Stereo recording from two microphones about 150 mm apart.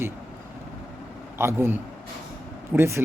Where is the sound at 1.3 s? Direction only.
15° right (ahead or behind).